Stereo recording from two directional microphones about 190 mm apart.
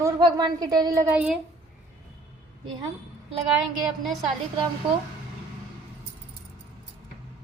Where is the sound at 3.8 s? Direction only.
Centre (ahead or behind).